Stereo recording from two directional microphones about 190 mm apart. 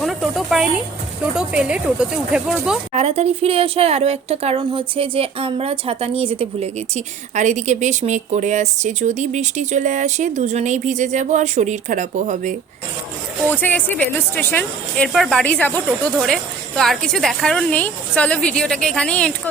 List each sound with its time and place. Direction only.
0.0 s speech: centre (ahead or behind)
2.9 s speech: 35° right (ahead or behind)
13.5 s speech: 10° left (ahead or behind)